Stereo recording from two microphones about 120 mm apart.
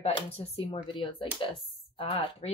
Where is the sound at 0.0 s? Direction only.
55° left (ahead or behind).